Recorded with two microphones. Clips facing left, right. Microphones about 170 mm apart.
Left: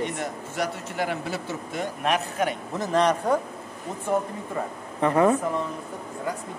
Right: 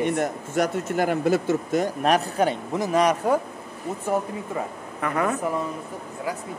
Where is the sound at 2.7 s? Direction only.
10° right (ahead or behind).